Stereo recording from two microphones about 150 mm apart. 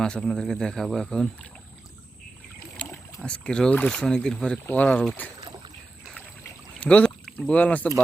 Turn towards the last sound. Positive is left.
turn(degrees=10)  # may be behind; listen again after turning